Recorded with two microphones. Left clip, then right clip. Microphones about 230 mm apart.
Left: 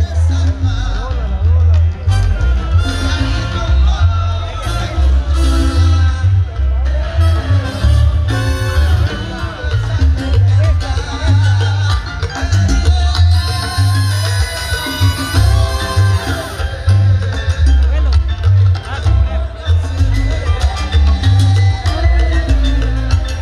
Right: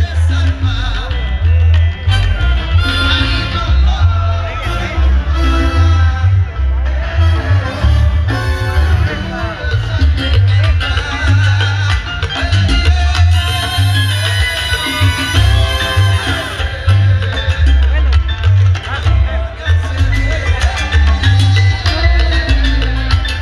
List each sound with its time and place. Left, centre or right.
2.8 s music: centre; by 4.0 s right
7.6 s music: right
12.3 s music: centre
20.5 s music: centre